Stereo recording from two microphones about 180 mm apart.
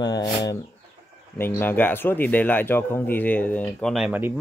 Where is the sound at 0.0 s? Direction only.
25° left (ahead or behind).